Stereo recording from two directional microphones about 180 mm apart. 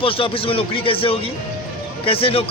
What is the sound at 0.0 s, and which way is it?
A man's voice, 30° left (ahead or behind).